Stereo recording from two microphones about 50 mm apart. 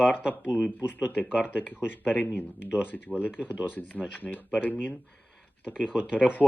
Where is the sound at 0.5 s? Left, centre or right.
Centre.